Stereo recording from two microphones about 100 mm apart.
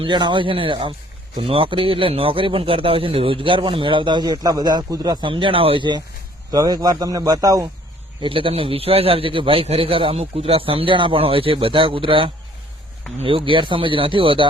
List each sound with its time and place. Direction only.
0.0 s a man's voice: 50° right (ahead or behind)
5.3 s a man's voice: 60° right (ahead or behind)
6.5 s a man's voice: 40° right (ahead or behind)
8.2 s a man's voice: 60° right (ahead or behind)